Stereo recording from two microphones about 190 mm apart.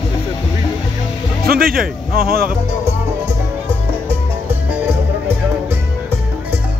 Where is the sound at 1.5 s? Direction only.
50° right (ahead or behind).